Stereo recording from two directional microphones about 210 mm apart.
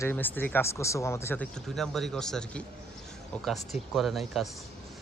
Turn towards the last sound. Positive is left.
turn(degrees=0)  # may be behind; listen again after turning